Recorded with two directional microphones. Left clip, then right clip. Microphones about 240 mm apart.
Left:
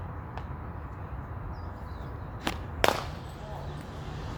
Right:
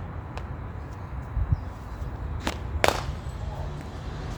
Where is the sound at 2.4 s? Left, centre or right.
Centre.